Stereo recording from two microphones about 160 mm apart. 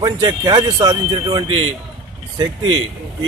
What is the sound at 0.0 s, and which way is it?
Speech, 25° right (ahead or behind).